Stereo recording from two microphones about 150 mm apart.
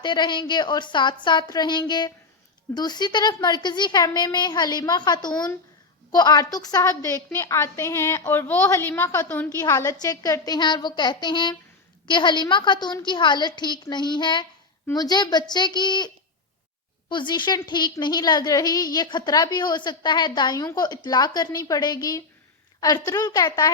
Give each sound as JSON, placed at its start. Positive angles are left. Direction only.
{"t": 0.0, "sound": "a woman's voice", "side_deg": 30}